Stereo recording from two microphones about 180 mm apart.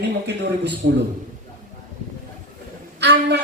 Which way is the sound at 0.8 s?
90° right.